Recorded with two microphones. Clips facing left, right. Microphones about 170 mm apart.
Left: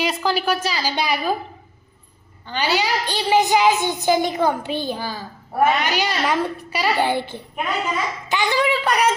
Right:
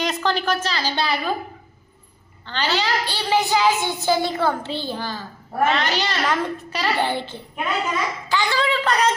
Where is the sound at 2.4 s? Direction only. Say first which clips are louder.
Left 2 dB; 10° left (ahead or behind).